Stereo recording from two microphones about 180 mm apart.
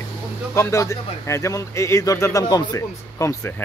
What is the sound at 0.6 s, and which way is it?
Speech, 15° left (ahead or behind).